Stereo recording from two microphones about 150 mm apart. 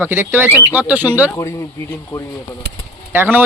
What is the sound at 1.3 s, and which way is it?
Speech, 20° left (ahead or behind).